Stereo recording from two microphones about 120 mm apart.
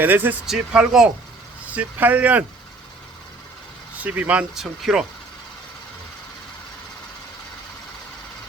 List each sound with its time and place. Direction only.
0.0 s speech: 15° right (ahead or behind)
0.4 s speech: 5° right (ahead or behind)
3.9 s speech: 10° right (ahead or behind)